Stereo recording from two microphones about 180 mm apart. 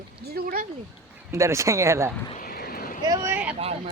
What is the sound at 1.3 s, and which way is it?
Speech, 15° right (ahead or behind).